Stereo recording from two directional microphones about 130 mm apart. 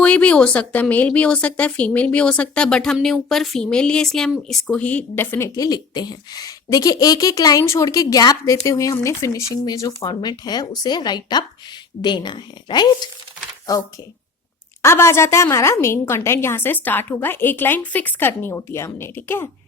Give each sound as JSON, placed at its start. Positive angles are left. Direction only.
{"t": 0.0, "sound": "a woman's voice", "side_deg": 10}
{"t": 5.5, "sound": "a woman's voice", "side_deg": 30}